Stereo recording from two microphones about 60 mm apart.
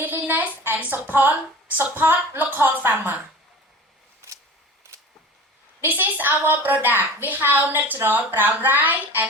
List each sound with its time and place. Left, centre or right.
0.0 s a sound: right
1.8 s a woman's voice: right
5.8 s a woman's voice: right